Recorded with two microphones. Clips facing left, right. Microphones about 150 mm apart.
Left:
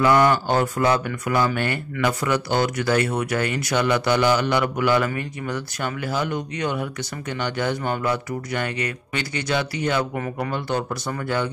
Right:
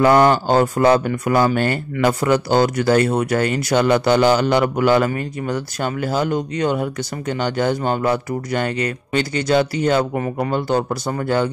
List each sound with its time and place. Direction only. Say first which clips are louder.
0.0 s speech: right 4 dB; 40° right (ahead or behind)
10.1 s speech: right 6 dB; 30° right (ahead or behind)